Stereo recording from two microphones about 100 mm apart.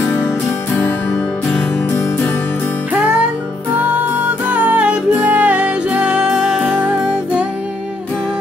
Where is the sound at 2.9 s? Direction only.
10° right (ahead or behind).